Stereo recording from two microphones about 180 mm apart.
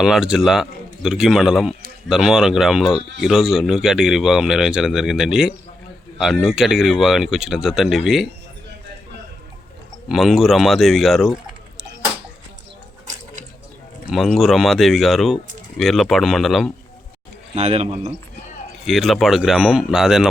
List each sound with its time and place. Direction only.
0.0 s speech: 5° right (ahead or behind)
10.1 s speech: centre (ahead or behind)
14.1 s speech: centre (ahead or behind)
17.5 s speech: 35° right (ahead or behind)
18.9 s speech: centre (ahead or behind)